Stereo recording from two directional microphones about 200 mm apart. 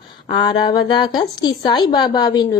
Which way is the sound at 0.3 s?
25° left (ahead or behind).